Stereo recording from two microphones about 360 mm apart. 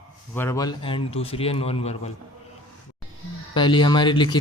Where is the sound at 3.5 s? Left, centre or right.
Centre.